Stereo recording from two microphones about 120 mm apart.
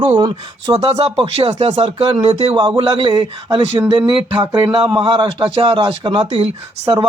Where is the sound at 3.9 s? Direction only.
40° right (ahead or behind).